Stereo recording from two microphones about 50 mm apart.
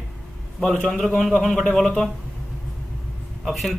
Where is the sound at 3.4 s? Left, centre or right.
Centre.